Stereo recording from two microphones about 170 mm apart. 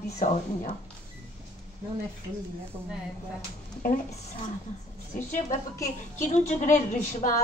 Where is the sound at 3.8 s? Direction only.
50° left (ahead or behind).